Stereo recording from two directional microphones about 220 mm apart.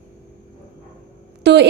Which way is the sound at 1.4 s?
50° right (ahead or behind).